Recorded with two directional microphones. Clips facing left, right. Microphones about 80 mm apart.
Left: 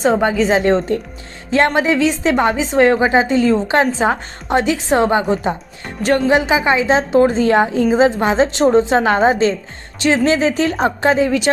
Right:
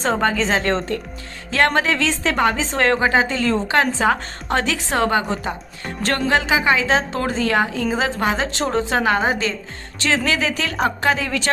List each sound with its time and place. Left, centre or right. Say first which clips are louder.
0.0 s a woman's voice: left 5 dB; centre
5.8 s a woman's voice: left 6 dB; centre